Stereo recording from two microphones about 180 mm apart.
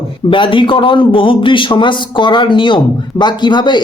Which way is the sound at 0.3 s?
30° left (ahead or behind).